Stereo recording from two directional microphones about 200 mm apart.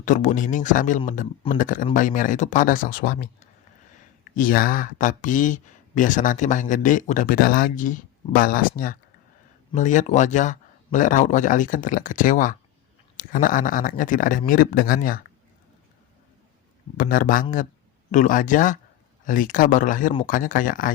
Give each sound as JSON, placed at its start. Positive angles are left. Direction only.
{"t": 0.0, "sound": "speech", "side_deg": 40}
{"t": 17.0, "sound": "speech", "side_deg": 45}